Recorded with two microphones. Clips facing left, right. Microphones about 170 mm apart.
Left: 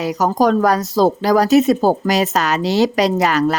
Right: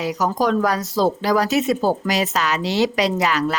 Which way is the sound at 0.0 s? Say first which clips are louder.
Left 4 dB; 45° left (ahead or behind).